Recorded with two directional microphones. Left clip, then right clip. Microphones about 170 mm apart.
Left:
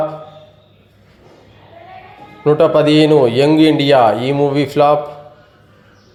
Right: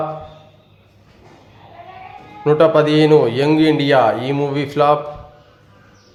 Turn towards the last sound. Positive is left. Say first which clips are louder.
# left 3 dB
turn(degrees=15)  # may be behind; listen again after turning